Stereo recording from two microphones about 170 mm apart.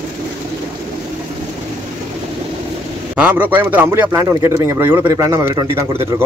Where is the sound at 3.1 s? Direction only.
10° right (ahead or behind).